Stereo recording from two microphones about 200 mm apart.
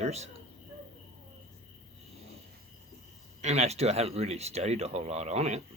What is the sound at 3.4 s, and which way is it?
Speech, 35° right (ahead or behind).